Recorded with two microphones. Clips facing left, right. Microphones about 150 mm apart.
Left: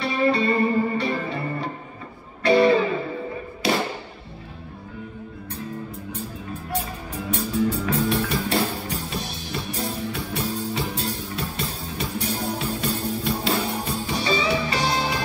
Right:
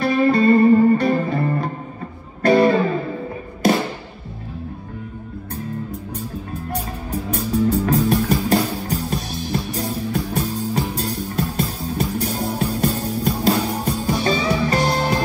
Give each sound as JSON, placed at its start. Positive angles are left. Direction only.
{"t": 0.0, "sound": "music", "side_deg": -45}
{"t": 3.6, "sound": "thump", "side_deg": -45}
{"t": 7.1, "sound": "music", "side_deg": -45}